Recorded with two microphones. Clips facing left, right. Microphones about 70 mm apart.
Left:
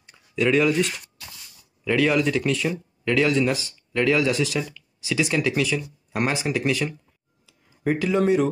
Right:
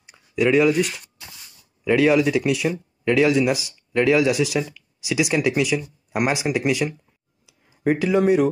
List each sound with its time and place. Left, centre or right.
0.0 s speech: centre